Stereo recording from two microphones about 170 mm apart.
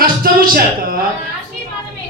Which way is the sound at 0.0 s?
60° right (ahead or behind).